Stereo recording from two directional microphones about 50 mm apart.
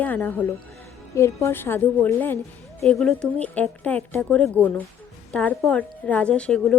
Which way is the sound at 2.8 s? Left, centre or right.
Centre.